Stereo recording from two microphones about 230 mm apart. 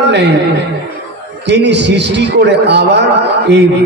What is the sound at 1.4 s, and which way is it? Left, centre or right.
A man's voice, right.